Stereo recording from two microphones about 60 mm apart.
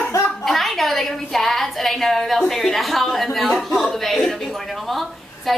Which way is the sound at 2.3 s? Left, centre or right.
Centre.